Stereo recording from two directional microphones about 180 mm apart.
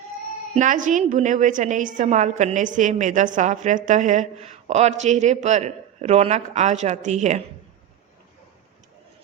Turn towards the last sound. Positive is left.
turn(degrees=-40)  # may be behind; listen again after turning